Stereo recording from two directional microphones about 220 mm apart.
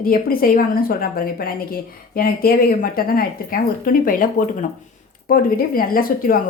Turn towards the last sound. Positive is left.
turn(degrees=40)  # may be behind; listen again after turning